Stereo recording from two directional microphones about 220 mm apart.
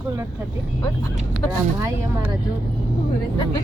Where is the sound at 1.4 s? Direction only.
10° left (ahead or behind).